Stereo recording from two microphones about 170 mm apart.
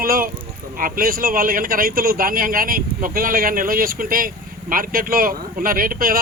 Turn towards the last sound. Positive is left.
turn(degrees=-55)  # may be behind; listen again after turning